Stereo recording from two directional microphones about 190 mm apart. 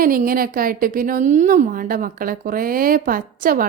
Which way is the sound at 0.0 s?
50° right (ahead or behind).